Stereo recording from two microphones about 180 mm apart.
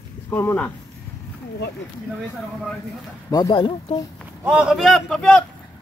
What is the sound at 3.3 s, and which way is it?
Speech, 25° left (ahead or behind).